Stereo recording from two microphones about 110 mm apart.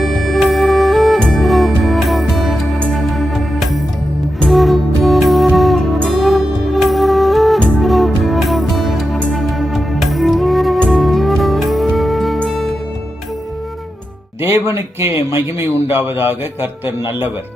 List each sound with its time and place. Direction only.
0.0 s music: centre (ahead or behind)
14.4 s a man's voice: 25° right (ahead or behind)